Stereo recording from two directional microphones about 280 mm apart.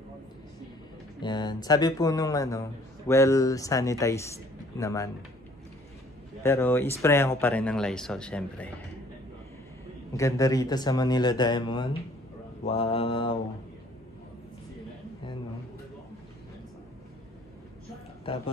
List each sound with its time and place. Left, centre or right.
1.2 s speech: centre
6.4 s speech: centre
10.1 s speech: centre
12.6 s mantra: left